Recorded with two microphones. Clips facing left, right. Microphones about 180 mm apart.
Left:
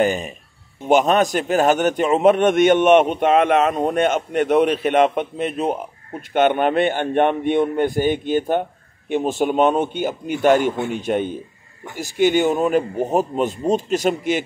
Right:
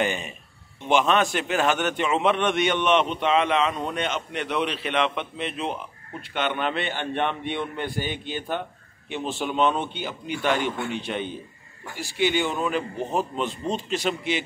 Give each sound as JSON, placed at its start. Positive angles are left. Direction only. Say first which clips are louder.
{"t": 0.0, "sound": "a man's voice", "louder": "left 7 dB", "side_deg": 40}